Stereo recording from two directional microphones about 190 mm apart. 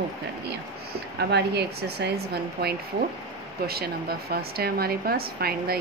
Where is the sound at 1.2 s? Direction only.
60° right (ahead or behind).